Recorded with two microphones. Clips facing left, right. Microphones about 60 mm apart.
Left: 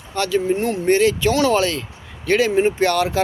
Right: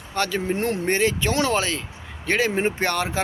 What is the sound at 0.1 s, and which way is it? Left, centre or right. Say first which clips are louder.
Speech: left 5 dB; right.